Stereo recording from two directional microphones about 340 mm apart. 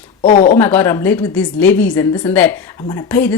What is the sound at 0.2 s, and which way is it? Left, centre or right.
Speech, left.